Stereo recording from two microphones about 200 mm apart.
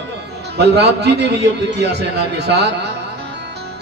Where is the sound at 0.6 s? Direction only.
55° right (ahead or behind).